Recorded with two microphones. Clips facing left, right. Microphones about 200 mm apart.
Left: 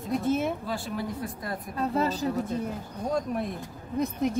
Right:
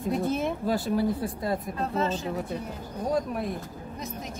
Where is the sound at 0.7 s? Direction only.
40° right (ahead or behind).